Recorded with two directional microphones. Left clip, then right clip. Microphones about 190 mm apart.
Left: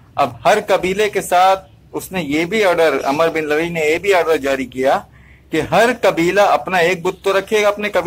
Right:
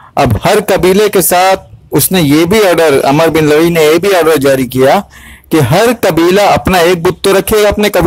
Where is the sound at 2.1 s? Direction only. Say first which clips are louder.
Right 9 dB; 60° right (ahead or behind).